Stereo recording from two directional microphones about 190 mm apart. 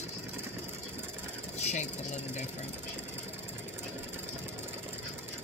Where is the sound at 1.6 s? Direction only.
35° left (ahead or behind).